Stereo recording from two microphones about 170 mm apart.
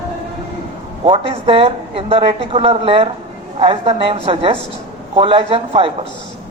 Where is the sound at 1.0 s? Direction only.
30° right (ahead or behind).